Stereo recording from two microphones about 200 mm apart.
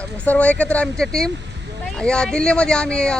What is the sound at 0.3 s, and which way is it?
Speech, 5° left (ahead or behind).